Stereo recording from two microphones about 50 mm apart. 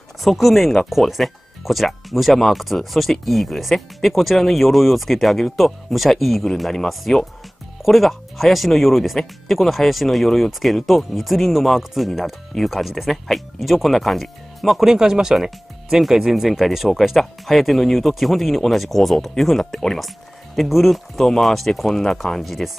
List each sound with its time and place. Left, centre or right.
0.2 s speech: centre